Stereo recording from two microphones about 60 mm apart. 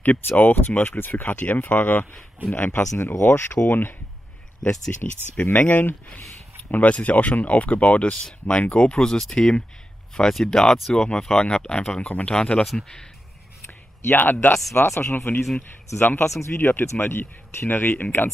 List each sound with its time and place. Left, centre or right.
0.0 s speech: left
4.6 s speech: centre
5.5 s speech: left; by 13.0 s centre
14.0 s speech: left
14.7 s speech: left
16.3 s speech: left
16.9 s speech: left